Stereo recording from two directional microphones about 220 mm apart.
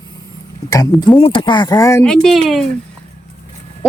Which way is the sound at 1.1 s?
20° left (ahead or behind).